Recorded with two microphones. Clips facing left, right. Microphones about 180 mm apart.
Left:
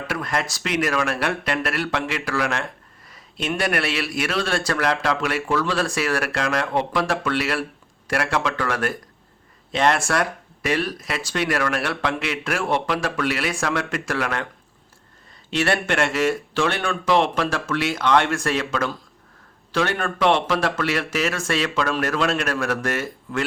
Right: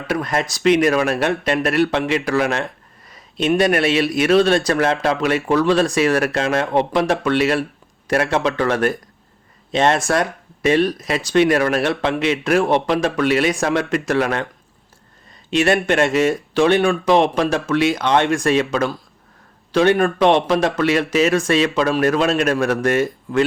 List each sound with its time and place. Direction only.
0.1 s speech: 20° right (ahead or behind)
15.4 s speech: 20° right (ahead or behind)